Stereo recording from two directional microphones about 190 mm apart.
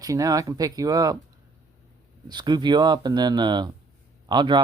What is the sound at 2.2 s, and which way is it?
Speech, 20° right (ahead or behind).